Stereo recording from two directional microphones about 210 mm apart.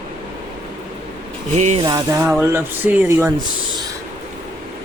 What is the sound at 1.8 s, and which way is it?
Speech, 15° right (ahead or behind).